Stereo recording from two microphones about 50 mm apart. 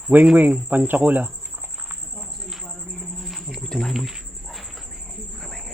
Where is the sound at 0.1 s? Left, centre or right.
Right.